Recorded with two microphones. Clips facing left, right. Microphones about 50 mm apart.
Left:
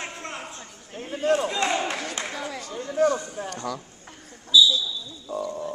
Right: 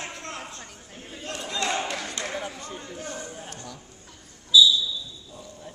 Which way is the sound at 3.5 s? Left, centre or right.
Left.